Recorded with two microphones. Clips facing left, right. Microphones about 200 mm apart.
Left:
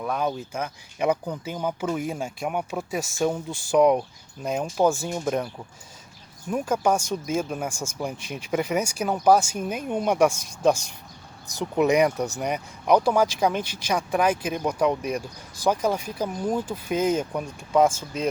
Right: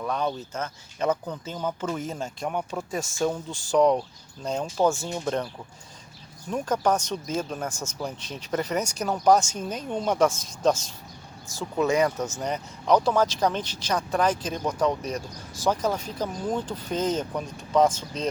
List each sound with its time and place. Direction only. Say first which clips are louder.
0.0 s speech: left 1 dB; 10° left (ahead or behind)
6.5 s speech: left 1 dB; 10° left (ahead or behind)